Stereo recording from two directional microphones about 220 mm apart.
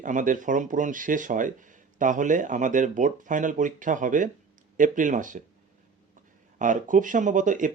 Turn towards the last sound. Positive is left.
turn(degrees=-35)  # may be behind; listen again after turning